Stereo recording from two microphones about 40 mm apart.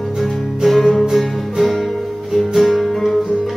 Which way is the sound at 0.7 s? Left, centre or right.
Centre.